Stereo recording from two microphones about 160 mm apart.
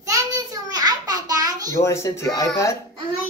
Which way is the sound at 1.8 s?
15° left (ahead or behind).